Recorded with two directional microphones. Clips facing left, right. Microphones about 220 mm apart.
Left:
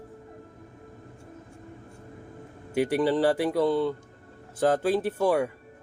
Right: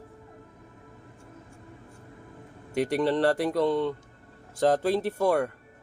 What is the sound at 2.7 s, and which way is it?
Speech, 5° left (ahead or behind).